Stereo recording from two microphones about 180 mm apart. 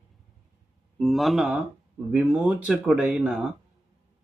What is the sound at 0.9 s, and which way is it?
Speech, centre (ahead or behind).